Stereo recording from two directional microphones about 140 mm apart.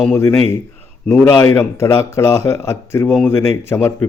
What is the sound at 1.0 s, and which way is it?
Speech, 10° left (ahead or behind).